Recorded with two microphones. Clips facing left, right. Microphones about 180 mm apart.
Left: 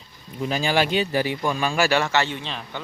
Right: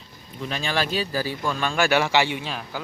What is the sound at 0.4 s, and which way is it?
Speech, 30° left (ahead or behind).